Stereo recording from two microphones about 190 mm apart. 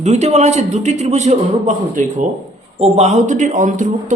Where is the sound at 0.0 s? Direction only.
35° right (ahead or behind).